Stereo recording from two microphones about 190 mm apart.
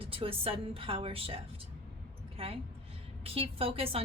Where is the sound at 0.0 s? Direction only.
30° right (ahead or behind).